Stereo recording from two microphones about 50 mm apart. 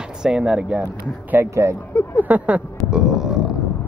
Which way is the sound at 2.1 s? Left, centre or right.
Right.